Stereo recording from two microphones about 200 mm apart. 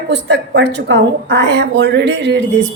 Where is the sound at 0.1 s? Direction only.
60° right (ahead or behind).